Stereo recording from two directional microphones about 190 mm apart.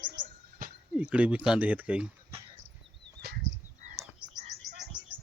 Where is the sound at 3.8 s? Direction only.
40° right (ahead or behind).